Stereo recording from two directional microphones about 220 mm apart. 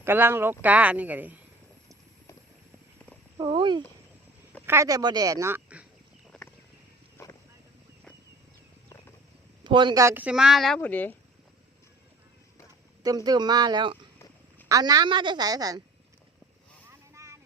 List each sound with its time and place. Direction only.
0.0 s speech: 10° right (ahead or behind)
3.3 s speech: 20° right (ahead or behind)
6.3 s a sound: centre (ahead or behind)
7.2 s a sound: 10° left (ahead or behind)
9.6 s speech: 20° right (ahead or behind); by 11.2 s 10° left (ahead or behind)
13.0 s speech: 15° right (ahead or behind)